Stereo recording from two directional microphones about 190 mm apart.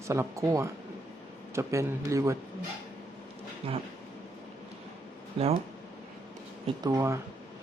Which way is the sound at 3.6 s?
30° right (ahead or behind).